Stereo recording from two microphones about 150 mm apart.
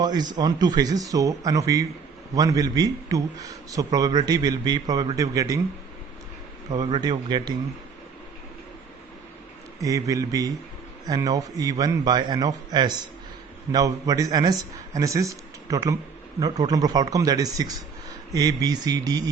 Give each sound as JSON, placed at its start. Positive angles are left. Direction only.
{"t": 0.0, "sound": "a man's voice", "side_deg": -30}
{"t": 6.7, "sound": "a man's voice", "side_deg": -25}
{"t": 9.8, "sound": "a man's voice", "side_deg": -20}